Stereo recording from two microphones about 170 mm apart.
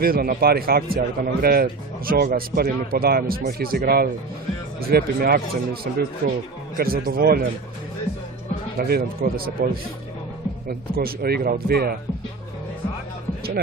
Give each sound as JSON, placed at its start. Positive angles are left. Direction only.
{"t": 0.0, "sound": "speech", "side_deg": -60}
{"t": 8.8, "sound": "speech", "side_deg": -65}
{"t": 10.7, "sound": "speech", "side_deg": -60}